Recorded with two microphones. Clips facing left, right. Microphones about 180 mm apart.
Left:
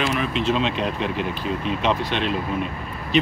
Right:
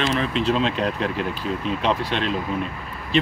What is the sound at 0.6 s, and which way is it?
Speech, 40° right (ahead or behind).